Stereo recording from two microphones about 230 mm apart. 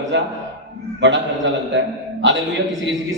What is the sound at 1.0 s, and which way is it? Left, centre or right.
A man's voice, right.